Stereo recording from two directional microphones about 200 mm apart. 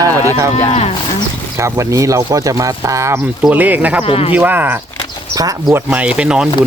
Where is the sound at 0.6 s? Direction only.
30° left (ahead or behind).